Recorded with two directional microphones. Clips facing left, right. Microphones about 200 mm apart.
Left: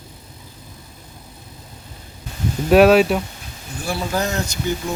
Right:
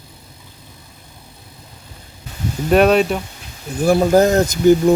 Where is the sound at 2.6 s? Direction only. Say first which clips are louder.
Left 1 dB; 5° left (ahead or behind).